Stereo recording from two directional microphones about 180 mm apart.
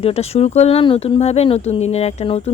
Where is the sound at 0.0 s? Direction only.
35° left (ahead or behind).